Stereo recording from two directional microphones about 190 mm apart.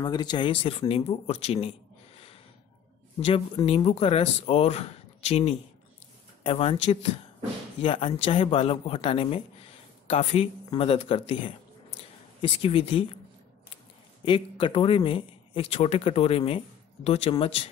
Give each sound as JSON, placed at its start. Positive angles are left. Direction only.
{"t": 0.0, "sound": "speech", "side_deg": 25}
{"t": 14.2, "sound": "speech", "side_deg": 25}